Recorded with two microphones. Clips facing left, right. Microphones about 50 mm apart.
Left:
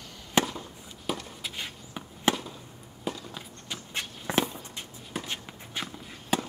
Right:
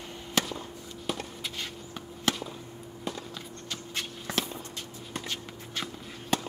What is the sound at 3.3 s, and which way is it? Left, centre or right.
Walk, centre.